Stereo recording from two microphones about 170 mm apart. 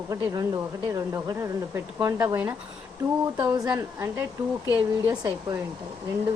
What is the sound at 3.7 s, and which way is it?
A woman's voice, 15° right (ahead or behind).